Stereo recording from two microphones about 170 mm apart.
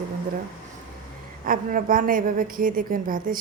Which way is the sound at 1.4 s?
55° right (ahead or behind).